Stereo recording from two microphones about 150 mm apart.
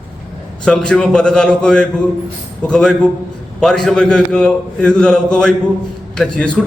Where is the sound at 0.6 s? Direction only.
5° left (ahead or behind).